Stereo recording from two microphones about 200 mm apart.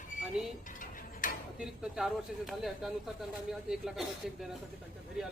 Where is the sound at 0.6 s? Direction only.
40° left (ahead or behind).